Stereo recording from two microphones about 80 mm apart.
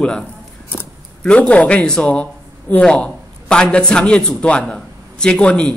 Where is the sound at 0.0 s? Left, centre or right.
Centre.